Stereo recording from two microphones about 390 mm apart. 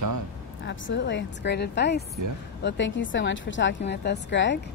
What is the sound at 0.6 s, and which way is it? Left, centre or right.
A woman's voice, left.